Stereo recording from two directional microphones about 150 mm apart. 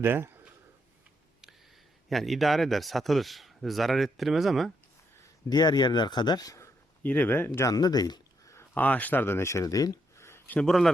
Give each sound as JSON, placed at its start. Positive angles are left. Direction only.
{"t": 0.0, "sound": "speech", "side_deg": -15}
{"t": 2.0, "sound": "speech", "side_deg": 0}
{"t": 5.5, "sound": "speech", "side_deg": 25}
{"t": 7.0, "sound": "speech", "side_deg": 10}
{"t": 10.6, "sound": "speech", "side_deg": 0}